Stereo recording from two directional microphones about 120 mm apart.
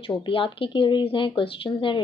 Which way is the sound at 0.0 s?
45° left (ahead or behind).